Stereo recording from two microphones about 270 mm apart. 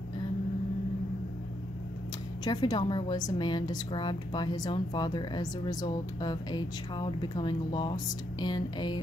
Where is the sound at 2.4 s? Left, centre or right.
Centre.